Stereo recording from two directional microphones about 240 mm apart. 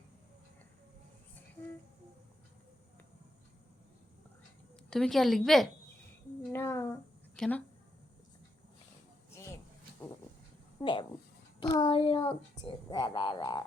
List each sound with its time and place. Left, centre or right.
4.9 s a woman's voice: centre
6.5 s a sound: centre
10.8 s speech: left